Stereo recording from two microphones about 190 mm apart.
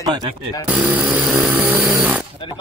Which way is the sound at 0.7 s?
5° right (ahead or behind).